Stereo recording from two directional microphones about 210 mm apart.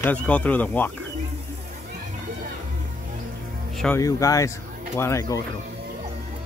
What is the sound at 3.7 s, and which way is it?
Speech, 5° left (ahead or behind).